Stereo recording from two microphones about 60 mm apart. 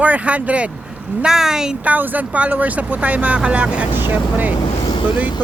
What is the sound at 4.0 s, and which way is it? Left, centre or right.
Speech, right.